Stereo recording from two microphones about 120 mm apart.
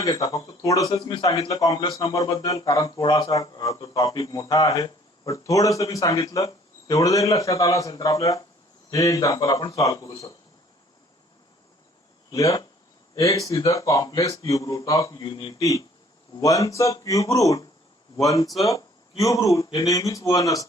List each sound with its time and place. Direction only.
0.0 s a man's voice: 30° left (ahead or behind)
12.3 s a man's voice: 30° left (ahead or behind)
15.2 s speech: 40° left (ahead or behind)
16.4 s a man's voice: 30° left (ahead or behind)
18.4 s speech: centre (ahead or behind)
18.7 s a man's voice: 30° left (ahead or behind)